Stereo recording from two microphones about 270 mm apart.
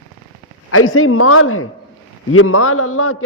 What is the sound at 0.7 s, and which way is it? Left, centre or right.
A man's voice, left.